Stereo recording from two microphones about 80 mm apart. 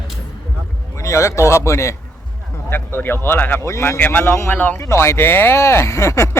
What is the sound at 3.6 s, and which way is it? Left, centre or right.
Speech, left.